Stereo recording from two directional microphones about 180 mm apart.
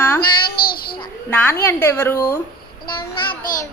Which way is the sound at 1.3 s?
10° left (ahead or behind).